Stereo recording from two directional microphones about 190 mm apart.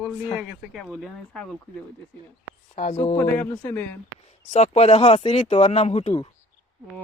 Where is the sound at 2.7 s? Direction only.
35° left (ahead or behind).